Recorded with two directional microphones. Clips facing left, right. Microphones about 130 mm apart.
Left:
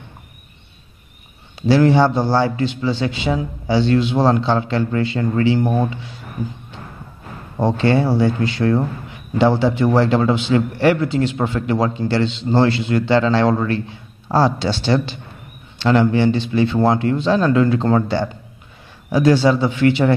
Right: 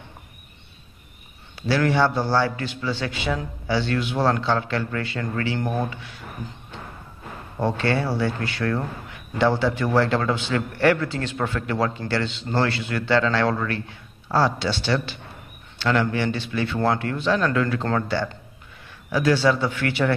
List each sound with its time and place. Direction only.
1.7 s a man's voice: 25° left (ahead or behind)
7.5 s a man's voice: 25° left (ahead or behind)